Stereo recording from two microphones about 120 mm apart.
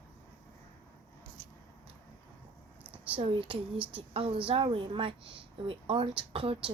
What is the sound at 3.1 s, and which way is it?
A woman's voice, 50° right (ahead or behind).